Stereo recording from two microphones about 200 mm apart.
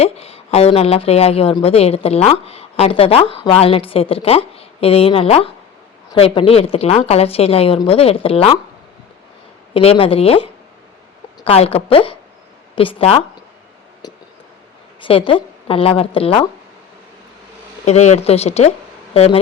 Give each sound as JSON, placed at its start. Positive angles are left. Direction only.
{"t": 0.0, "sound": "a woman's voice", "side_deg": 30}
{"t": 9.7, "sound": "a woman's voice", "side_deg": 30}
{"t": 14.0, "sound": "a sound", "side_deg": 20}
{"t": 15.0, "sound": "a woman's voice", "side_deg": 25}
{"t": 17.8, "sound": "a woman's voice", "side_deg": 35}